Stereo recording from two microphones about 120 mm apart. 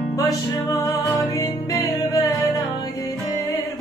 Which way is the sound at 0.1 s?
25° left (ahead or behind).